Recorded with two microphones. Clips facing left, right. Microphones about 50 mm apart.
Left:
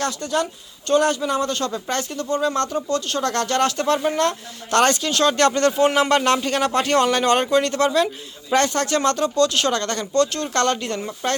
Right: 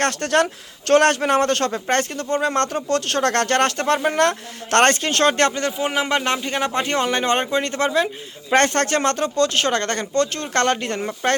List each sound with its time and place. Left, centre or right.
0.0 s speech: right
5.5 s speech: centre
8.5 s speech: right